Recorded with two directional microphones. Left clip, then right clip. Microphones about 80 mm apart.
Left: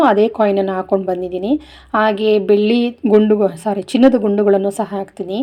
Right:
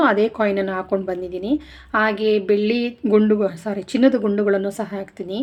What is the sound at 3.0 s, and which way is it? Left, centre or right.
Speech, centre.